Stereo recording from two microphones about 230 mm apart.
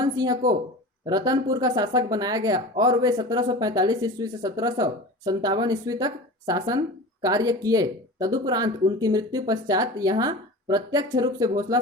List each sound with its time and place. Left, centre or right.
0.0 s speech: centre